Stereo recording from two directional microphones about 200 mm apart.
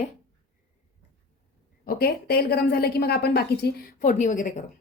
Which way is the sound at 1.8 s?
50° left (ahead or behind).